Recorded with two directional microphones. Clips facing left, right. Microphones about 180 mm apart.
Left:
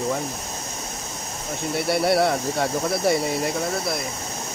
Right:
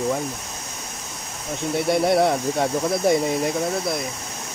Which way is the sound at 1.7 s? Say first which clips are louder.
Right 2 dB; 20° right (ahead or behind).